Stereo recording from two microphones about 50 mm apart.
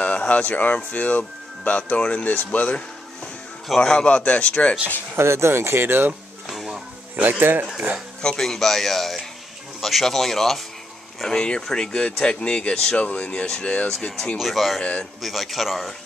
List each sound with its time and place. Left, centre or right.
0.0 s speech: left
3.8 s speech: centre
5.1 s speech: right
6.4 s a sound: centre
7.2 s speech: right
8.2 s speech: centre
14.4 s speech: centre
14.8 s speech: left
15.2 s speech: centre